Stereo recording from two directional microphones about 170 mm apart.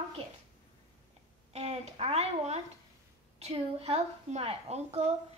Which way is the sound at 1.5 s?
40° right (ahead or behind).